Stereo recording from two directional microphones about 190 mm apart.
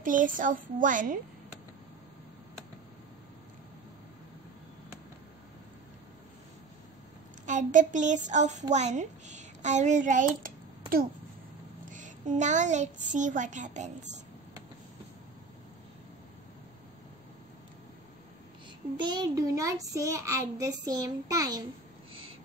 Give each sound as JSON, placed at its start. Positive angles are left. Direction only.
{"t": 0.0, "sound": "a child's voice", "side_deg": -45}
{"t": 7.4, "sound": "a woman's voice", "side_deg": -40}
{"t": 11.9, "sound": "a woman's voice", "side_deg": -40}
{"t": 18.9, "sound": "child singing", "side_deg": -25}